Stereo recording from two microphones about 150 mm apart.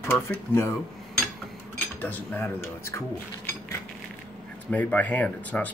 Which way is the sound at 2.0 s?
10° left (ahead or behind).